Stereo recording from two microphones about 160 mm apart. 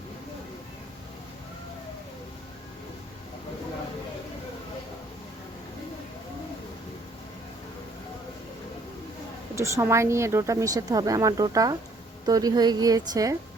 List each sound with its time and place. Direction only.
9.6 s speech: 20° right (ahead or behind)